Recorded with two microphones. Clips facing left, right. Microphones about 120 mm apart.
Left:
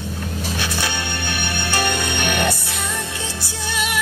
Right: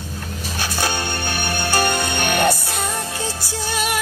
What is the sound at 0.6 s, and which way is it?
Music, 40° right (ahead or behind).